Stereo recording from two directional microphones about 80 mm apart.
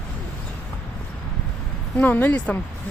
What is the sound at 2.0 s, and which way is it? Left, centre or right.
Speech, centre.